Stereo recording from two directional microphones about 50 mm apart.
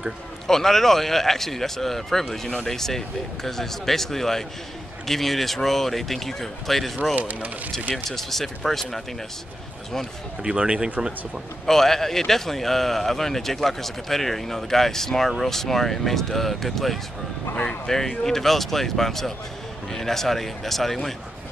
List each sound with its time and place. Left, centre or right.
0.5 s a man's voice: centre
7.2 s speech: right
7.9 s a man's voice: centre
10.4 s speech: centre
11.6 s a man's voice: centre